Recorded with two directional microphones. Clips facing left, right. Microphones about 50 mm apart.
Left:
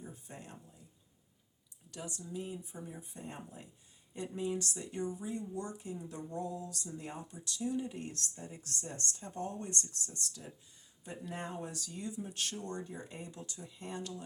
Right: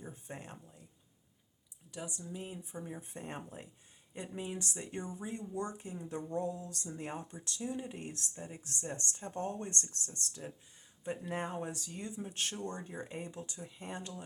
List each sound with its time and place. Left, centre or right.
0.0 s a sound: right
1.9 s speech: centre; by 3.7 s right
4.1 s speech: right